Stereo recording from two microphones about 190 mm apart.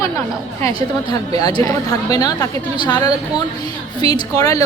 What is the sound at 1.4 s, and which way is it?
A woman's voice, 20° left (ahead or behind).